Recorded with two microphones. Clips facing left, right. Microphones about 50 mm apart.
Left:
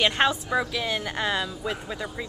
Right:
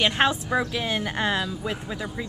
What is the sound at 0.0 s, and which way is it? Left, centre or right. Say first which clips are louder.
A woman's voice: right 1 dB; centre.